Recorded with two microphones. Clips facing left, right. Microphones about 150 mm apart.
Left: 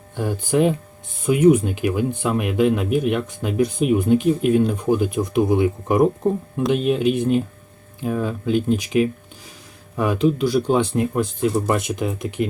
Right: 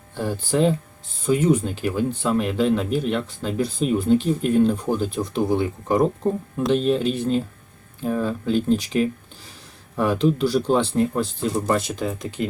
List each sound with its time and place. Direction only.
0.2 s speech: 15° left (ahead or behind)